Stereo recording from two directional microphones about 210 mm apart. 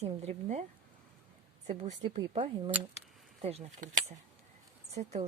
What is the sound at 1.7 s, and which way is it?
Speech, 35° right (ahead or behind).